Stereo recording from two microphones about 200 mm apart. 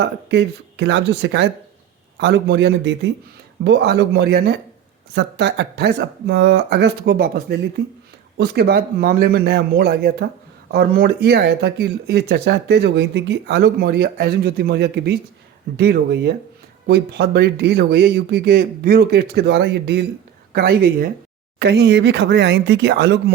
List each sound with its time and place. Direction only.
0.0 s speech: 60° right (ahead or behind)